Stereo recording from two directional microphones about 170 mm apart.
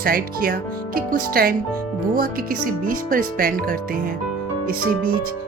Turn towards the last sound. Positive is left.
turn(degrees=-55)  # may be behind; listen again after turning